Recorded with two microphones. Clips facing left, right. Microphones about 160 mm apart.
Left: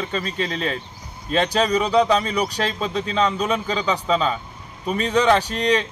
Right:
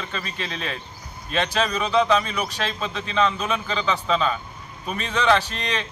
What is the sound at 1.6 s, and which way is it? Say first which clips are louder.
A man's voice: left 3 dB; 15° left (ahead or behind).